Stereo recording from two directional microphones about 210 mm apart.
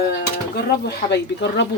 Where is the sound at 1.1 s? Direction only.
55° left (ahead or behind).